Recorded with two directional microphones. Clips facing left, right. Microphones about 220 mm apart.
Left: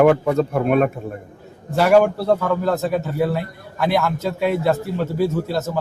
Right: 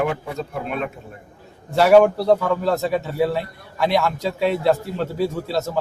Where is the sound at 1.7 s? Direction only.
Centre (ahead or behind).